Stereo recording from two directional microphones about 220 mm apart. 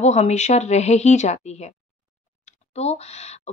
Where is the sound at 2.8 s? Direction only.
30° left (ahead or behind).